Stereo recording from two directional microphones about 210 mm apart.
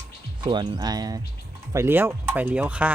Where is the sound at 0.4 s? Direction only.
20° right (ahead or behind).